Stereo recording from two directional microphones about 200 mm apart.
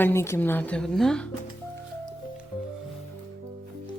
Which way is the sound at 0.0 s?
15° left (ahead or behind).